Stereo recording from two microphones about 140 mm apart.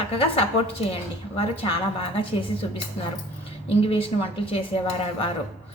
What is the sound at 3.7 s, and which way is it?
A woman's voice, 45° left (ahead or behind).